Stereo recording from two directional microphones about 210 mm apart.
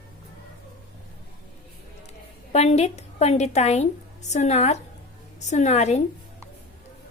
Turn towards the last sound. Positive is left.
turn(degrees=30)  # may be behind; listen again after turning